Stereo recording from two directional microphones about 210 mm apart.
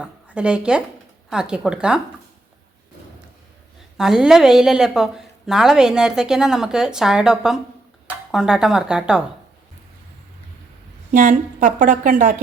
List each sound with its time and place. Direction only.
0.0 s a woman's voice: 5° right (ahead or behind)
3.9 s a woman's voice: centre (ahead or behind)
11.1 s a woman's voice: 35° right (ahead or behind)